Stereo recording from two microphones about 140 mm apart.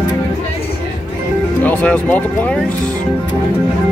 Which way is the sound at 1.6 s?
10° left (ahead or behind).